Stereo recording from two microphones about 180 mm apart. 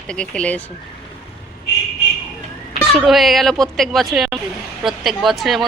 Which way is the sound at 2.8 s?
Centre (ahead or behind).